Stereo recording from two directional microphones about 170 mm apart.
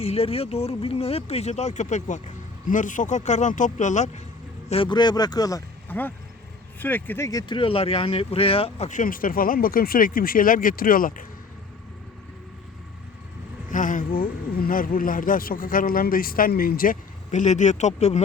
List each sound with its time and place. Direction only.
0.0 s speech: 35° left (ahead or behind)
4.7 s speech: 30° left (ahead or behind); by 11.3 s 55° left (ahead or behind)
13.7 s speech: 50° left (ahead or behind)